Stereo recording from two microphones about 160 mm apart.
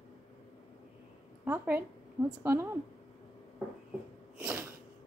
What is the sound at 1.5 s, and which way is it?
A woman's voice, 10° right (ahead or behind).